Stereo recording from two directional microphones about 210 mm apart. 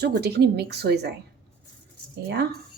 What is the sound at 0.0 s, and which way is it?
Speech, 50° right (ahead or behind).